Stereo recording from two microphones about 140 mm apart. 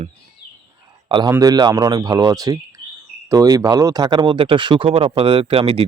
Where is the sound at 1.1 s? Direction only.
35° right (ahead or behind).